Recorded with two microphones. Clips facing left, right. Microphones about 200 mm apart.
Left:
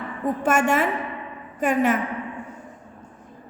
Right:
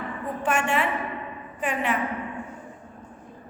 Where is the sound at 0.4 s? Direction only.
45° left (ahead or behind).